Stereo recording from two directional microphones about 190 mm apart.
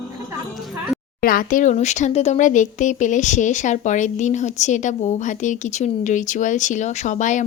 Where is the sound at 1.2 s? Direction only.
50° left (ahead or behind).